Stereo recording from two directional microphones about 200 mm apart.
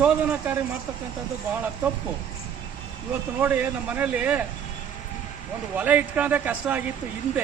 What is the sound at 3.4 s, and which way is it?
Speech, 10° right (ahead or behind).